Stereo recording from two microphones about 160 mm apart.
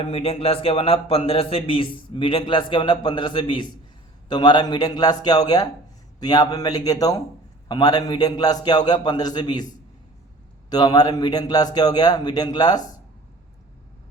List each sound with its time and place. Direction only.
0.0 s a man's voice: 35° left (ahead or behind)
10.7 s a man's voice: 25° left (ahead or behind)